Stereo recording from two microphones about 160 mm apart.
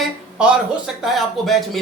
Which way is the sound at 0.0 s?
5° right (ahead or behind).